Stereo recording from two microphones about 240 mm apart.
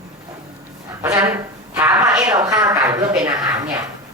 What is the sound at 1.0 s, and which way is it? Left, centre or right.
Speech, centre.